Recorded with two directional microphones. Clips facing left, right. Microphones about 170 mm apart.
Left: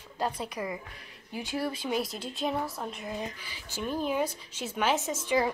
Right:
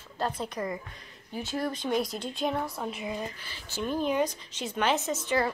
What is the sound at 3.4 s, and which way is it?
Speech, 10° left (ahead or behind).